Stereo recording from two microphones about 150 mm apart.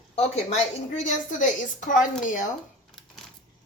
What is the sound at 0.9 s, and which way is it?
Speech, 55° left (ahead or behind).